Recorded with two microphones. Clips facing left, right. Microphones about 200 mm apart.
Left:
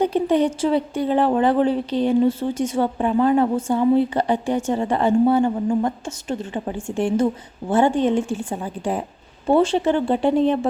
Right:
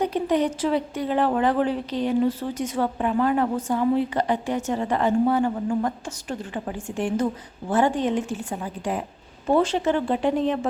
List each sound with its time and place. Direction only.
0.0 s a woman's voice: 30° left (ahead or behind)